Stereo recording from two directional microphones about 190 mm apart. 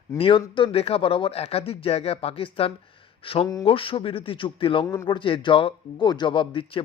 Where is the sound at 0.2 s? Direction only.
25° left (ahead or behind).